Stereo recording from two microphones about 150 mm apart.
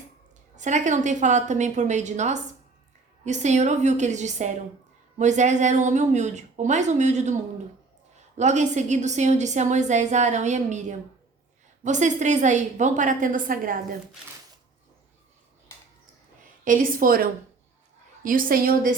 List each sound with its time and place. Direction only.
0.5 s a woman's voice: 55° right (ahead or behind); by 13.7 s 70° right (ahead or behind)
16.6 s a woman's voice: 65° right (ahead or behind)